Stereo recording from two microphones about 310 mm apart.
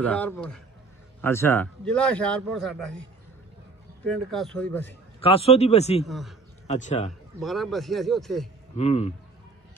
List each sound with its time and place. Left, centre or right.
0.0 s a man's voice: centre
4.0 s a man's voice: centre
5.2 s speech: centre
6.0 s a man's voice: centre
6.7 s speech: left
7.3 s a man's voice: centre
8.7 s speech: left